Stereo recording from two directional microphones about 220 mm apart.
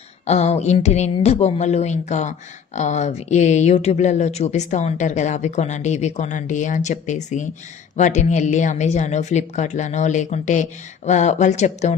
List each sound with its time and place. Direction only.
0.3 s speech: 30° left (ahead or behind)